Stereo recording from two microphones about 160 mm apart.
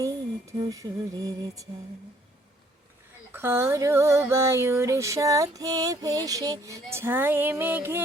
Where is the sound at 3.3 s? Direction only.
15° right (ahead or behind).